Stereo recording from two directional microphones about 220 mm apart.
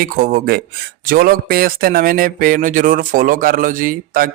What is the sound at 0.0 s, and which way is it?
Speech, 40° right (ahead or behind).